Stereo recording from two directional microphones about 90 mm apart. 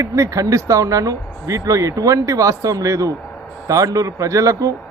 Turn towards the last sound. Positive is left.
turn(degrees=-40)  # may be behind; listen again after turning